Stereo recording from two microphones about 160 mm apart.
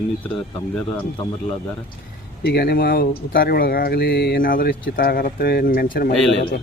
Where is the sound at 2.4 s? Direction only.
85° left; by 6.1 s 70° left (ahead or behind).